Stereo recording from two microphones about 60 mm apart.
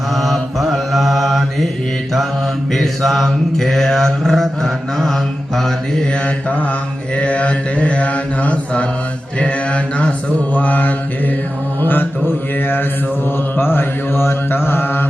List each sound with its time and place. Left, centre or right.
0.2 s mantra: centre
2.7 s mantra: centre
7.2 s mantra: left
13.6 s mantra: left